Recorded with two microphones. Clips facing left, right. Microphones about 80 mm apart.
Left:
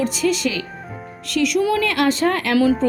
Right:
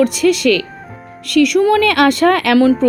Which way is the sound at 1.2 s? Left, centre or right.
Right.